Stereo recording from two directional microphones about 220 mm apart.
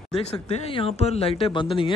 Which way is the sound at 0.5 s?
25° left (ahead or behind).